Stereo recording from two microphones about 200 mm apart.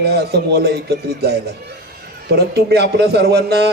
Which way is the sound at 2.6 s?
55° right (ahead or behind).